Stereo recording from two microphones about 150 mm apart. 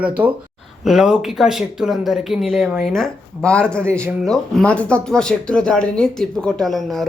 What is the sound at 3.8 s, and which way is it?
Speech, 15° right (ahead or behind).